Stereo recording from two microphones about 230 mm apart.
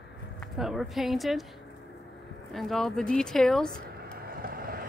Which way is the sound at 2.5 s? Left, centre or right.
Centre.